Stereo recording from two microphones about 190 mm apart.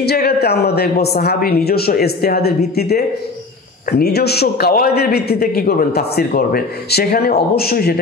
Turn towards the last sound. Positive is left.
turn(degrees=55)  # may be behind; listen again after turning